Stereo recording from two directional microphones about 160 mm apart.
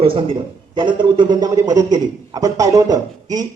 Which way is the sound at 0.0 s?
35° right (ahead or behind).